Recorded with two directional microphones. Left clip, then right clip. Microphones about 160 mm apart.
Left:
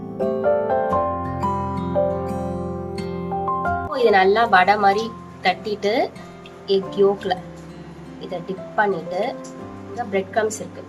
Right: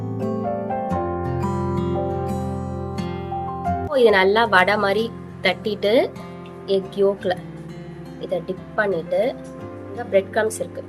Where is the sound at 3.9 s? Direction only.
55° right (ahead or behind).